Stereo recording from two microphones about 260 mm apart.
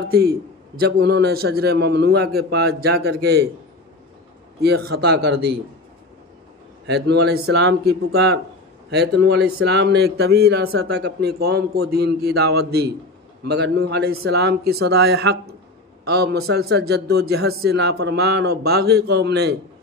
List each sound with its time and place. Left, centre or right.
0.1 s a man's voice: right
4.6 s a man's voice: right
6.9 s a man's voice: right